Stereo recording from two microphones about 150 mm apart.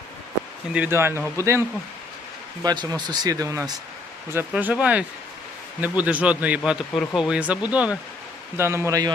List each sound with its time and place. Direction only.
0.7 s speech: 15° right (ahead or behind)
2.6 s speech: 25° right (ahead or behind); by 6.6 s 10° right (ahead or behind)
6.7 s speech: centre (ahead or behind); by 9.1 s 25° right (ahead or behind)